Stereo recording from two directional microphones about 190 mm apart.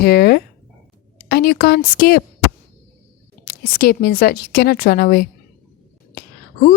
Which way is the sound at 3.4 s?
50° left (ahead or behind).